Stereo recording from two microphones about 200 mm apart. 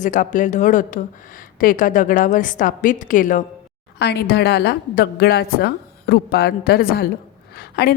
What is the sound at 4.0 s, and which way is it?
A woman's voice, 55° left (ahead or behind).